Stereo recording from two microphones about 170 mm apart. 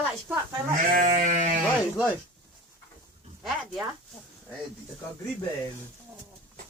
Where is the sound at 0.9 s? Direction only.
55° right (ahead or behind).